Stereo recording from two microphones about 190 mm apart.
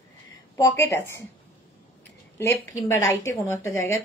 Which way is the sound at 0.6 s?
15° left (ahead or behind).